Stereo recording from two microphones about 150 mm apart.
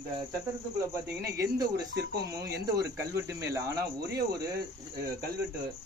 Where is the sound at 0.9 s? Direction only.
20° right (ahead or behind).